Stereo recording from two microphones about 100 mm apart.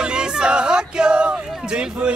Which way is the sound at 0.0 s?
10° right (ahead or behind).